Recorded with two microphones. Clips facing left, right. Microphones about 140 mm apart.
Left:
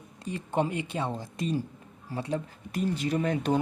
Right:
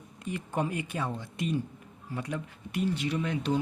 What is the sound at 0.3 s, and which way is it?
Speech, 30° left (ahead or behind).